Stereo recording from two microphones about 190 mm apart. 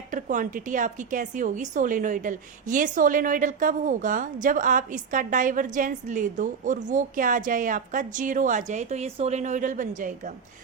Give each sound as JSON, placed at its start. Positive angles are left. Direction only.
{"t": 0.1, "sound": "a woman's voice", "side_deg": -45}